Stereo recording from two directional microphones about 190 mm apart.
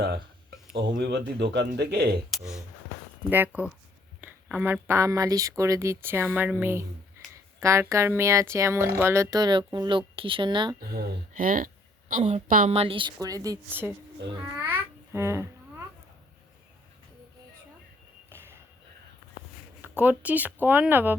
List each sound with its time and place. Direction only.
0.7 s speech: 65° right (ahead or behind)
2.3 s speech: centre (ahead or behind); by 10.8 s 25° right (ahead or behind)
10.8 s a woman's voice: 50° right (ahead or behind); by 13.9 s 15° right (ahead or behind)
14.6 s babbling: 10° right (ahead or behind)
18.3 s a sound: 10° right (ahead or behind)
20.0 s speech: 10° right (ahead or behind)